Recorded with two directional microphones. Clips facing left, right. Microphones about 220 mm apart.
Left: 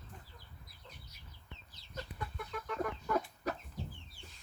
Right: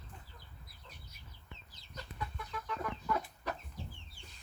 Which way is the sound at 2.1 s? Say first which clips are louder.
Right 1 dB; 45° left (ahead or behind).